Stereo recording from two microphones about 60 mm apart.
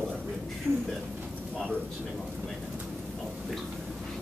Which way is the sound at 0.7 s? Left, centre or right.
Right.